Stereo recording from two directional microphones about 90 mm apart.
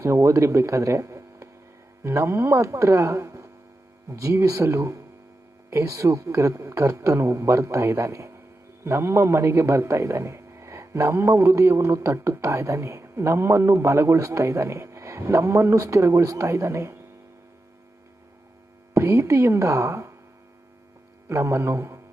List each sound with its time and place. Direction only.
0.0 s a man's voice: 35° right (ahead or behind)
18.9 s a man's voice: 35° right (ahead or behind)
21.2 s a man's voice: 30° right (ahead or behind)